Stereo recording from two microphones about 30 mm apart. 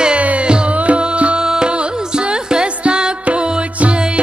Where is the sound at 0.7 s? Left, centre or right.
Right.